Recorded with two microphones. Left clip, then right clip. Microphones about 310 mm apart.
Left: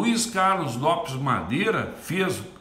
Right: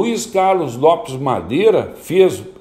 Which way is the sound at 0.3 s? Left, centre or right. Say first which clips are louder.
Right 8 dB; centre.